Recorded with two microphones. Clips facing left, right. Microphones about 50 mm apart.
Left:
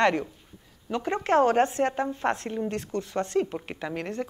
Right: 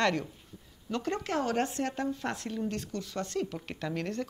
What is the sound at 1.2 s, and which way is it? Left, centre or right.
Speech, left.